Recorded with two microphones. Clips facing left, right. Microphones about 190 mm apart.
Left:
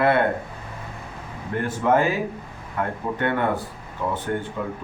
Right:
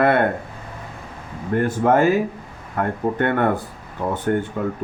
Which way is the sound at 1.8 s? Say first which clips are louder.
Right 3 dB; 50° right (ahead or behind).